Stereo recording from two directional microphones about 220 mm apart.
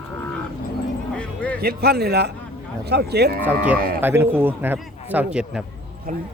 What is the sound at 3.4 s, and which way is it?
A man's voice, 10° right (ahead or behind).